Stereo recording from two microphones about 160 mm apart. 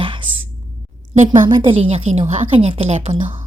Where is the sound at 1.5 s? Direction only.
30° right (ahead or behind).